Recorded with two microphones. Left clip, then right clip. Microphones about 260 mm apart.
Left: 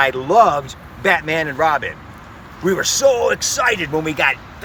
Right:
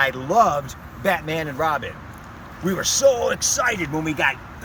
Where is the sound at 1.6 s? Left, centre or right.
Centre.